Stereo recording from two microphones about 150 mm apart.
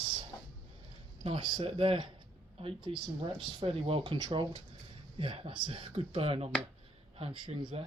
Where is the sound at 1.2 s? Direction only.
40° right (ahead or behind).